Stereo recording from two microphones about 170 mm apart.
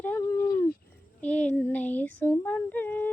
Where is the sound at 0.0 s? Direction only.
15° left (ahead or behind).